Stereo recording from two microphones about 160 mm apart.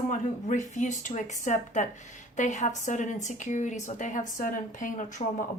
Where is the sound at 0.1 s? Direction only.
50° left (ahead or behind).